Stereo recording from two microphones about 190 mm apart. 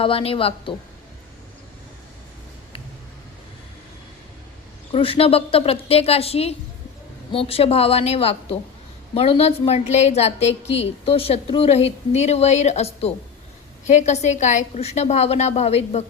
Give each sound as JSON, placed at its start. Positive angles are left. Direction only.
{"t": 0.0, "sound": "a woman's voice", "side_deg": 30}
{"t": 4.9, "sound": "a woman's voice", "side_deg": 30}